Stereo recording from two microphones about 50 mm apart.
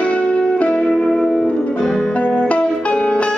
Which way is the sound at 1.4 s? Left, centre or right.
Left.